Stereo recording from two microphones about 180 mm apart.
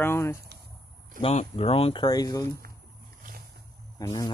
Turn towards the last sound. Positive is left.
turn(degrees=20)  # may be behind; listen again after turning